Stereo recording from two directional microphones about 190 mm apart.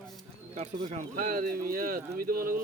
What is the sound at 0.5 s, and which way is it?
Speech, 35° right (ahead or behind).